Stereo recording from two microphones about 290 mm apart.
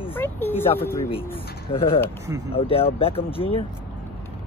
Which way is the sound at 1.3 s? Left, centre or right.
Centre.